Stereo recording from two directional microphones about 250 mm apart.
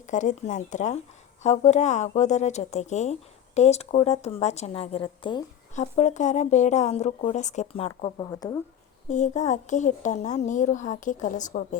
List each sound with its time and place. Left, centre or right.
0.1 s speech: left; by 8.5 s centre
9.0 s speech: left